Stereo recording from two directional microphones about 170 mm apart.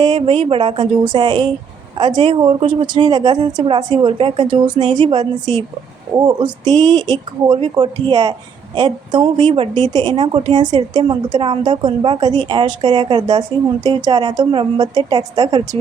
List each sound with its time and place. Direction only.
0.0 s speech: 30° right (ahead or behind)